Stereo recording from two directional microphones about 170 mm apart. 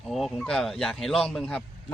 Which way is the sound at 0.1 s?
Centre (ahead or behind).